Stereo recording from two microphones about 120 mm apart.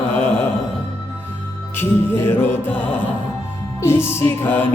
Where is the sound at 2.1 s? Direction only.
20° left (ahead or behind).